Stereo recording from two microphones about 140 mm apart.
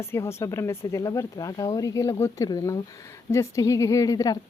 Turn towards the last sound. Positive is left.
turn(degrees=25)  # may be behind; listen again after turning